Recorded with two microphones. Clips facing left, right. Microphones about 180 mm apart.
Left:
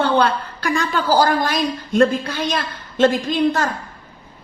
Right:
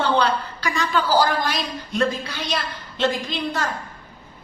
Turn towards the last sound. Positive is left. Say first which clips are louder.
# left 8 dB
turn(degrees=50)  # may be behind; listen again after turning